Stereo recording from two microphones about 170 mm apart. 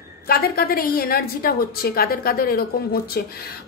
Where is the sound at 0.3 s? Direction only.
60° left (ahead or behind).